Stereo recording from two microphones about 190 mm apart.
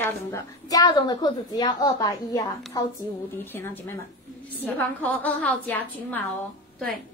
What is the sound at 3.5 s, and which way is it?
A woman's voice, 10° left (ahead or behind).